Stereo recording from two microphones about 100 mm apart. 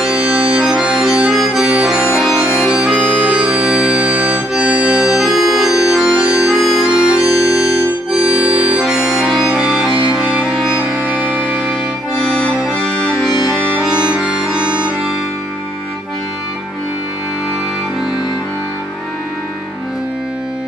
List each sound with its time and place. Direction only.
0.0 s accordion: 10° right (ahead or behind)
2.5 s music: 5° right (ahead or behind)
7.2 s music: 35° left (ahead or behind)
8.4 s music: 15° right (ahead or behind)
13.8 s harmonica: 10° right (ahead or behind)